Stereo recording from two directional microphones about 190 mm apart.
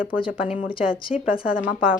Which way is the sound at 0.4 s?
35° left (ahead or behind).